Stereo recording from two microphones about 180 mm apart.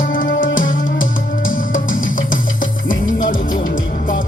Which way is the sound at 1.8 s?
90° left.